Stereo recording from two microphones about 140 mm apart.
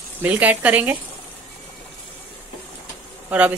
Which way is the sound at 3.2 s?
10° right (ahead or behind).